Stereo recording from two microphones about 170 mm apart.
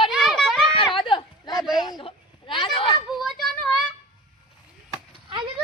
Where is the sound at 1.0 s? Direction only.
30° left (ahead or behind).